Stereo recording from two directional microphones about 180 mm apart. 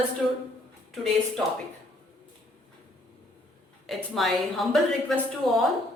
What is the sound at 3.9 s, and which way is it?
A woman's voice, centre (ahead or behind).